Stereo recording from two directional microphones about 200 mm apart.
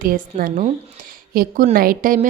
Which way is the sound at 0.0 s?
45° right (ahead or behind).